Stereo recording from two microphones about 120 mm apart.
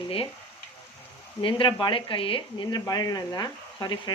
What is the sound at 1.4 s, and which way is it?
Speech, 45° left (ahead or behind).